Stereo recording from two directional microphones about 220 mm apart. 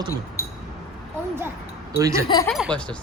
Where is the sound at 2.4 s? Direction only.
Centre (ahead or behind).